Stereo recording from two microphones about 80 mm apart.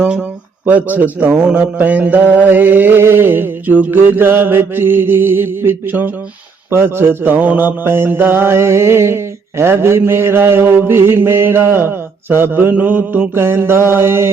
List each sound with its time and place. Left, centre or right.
0.0 s speech: centre
6.7 s mantra: right